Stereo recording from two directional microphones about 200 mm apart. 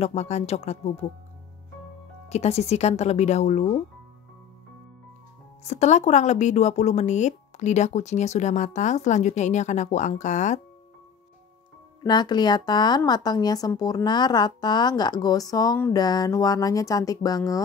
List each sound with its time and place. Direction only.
0.0 s a woman's voice: 35° left (ahead or behind)
2.2 s a woman's voice: 30° left (ahead or behind)
5.6 s a woman's voice: 35° left (ahead or behind)
12.0 s speech: 20° left (ahead or behind)